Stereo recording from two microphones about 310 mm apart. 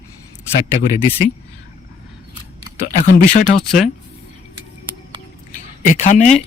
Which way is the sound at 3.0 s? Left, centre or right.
Left.